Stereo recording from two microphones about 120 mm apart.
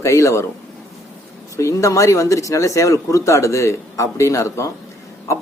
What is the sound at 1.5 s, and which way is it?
Speech, 25° left (ahead or behind).